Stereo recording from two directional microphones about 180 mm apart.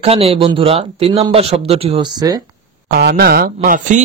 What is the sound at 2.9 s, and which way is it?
Speech, 60° right (ahead or behind).